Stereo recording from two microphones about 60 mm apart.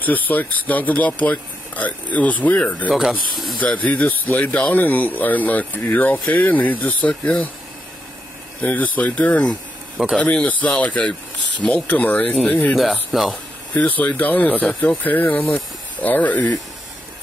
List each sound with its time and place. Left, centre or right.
0.0 s speech: left
2.9 s speech: centre
3.5 s speech: left
4.6 s speech: centre
8.5 s speech: left
10.0 s speech: centre
10.3 s speech: centre
13.1 s speech: centre
13.7 s speech: left
14.7 s speech: centre
15.0 s speech: left